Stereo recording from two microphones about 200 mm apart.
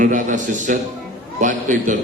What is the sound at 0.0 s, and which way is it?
A man's voice, 40° right (ahead or behind).